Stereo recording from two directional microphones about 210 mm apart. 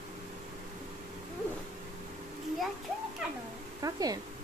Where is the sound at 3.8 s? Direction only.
15° right (ahead or behind).